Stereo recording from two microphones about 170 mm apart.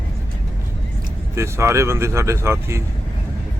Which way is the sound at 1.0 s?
15° right (ahead or behind).